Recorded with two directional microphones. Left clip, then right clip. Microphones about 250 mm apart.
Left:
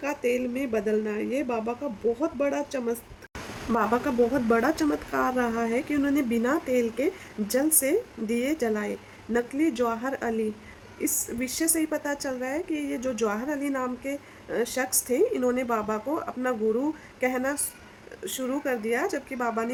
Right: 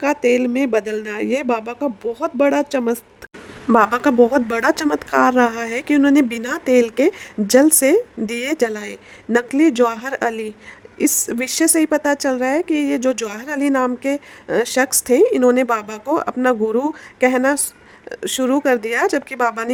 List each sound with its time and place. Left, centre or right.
0.0 s speech: right